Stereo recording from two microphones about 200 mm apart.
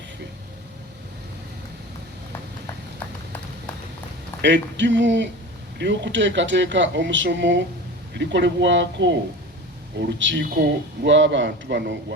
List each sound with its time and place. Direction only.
4.4 s speech: 65° right (ahead or behind)